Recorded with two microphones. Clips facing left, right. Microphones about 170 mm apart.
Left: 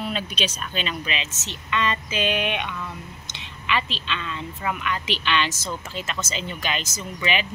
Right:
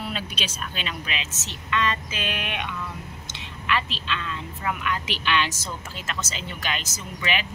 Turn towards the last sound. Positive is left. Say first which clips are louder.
# left 3 dB
turn(degrees=0)  # may be behind; listen again after turning